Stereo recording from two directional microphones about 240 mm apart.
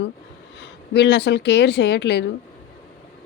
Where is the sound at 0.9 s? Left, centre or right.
Left.